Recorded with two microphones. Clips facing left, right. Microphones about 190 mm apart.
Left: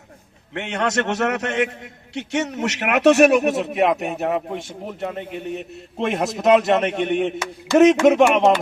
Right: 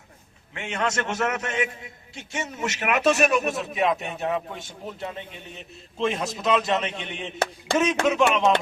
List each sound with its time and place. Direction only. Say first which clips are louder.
0.5 s a man's voice: left 5 dB; 65° left (ahead or behind)